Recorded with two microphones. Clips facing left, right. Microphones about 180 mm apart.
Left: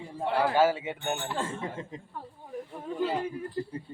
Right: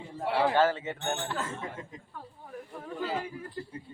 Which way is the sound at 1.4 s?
30° left (ahead or behind).